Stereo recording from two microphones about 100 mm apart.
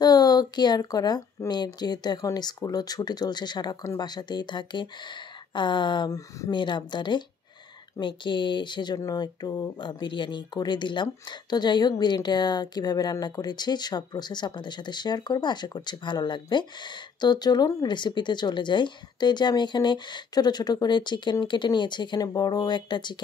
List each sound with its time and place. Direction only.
0.0 s a sound: 40° left (ahead or behind)
1.5 s speech: 45° left (ahead or behind)
9.8 s speech: 50° left (ahead or behind)
17.8 s speech: 50° left (ahead or behind)